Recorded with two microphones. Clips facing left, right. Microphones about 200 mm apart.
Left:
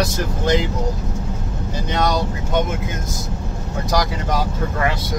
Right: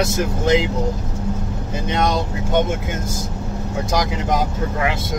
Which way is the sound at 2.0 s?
25° right (ahead or behind).